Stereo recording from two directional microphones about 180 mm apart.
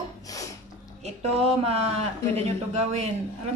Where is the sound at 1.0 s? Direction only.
35° right (ahead or behind).